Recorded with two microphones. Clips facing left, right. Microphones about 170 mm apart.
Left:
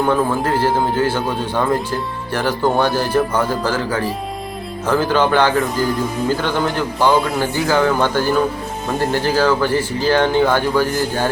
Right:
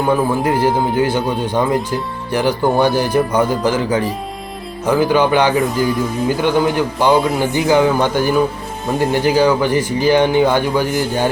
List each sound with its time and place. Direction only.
0.4 s speech: 15° right (ahead or behind)